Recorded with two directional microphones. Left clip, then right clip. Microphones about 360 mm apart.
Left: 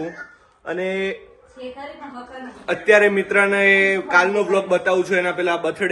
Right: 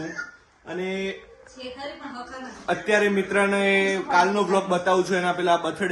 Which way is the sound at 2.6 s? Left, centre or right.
Centre.